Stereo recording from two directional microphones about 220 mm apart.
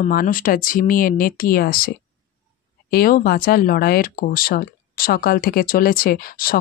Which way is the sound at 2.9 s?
40° left (ahead or behind).